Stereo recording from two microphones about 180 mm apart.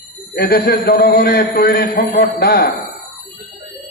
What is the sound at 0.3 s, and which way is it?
A man's voice, 60° left (ahead or behind).